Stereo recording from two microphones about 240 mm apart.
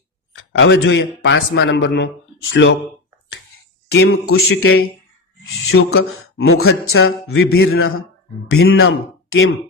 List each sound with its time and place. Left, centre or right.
0.5 s a man's voice: left
3.9 s a man's voice: left
4.3 s a man's voice: left